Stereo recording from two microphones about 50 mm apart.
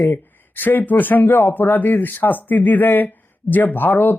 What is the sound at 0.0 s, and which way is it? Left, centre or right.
Speech, left.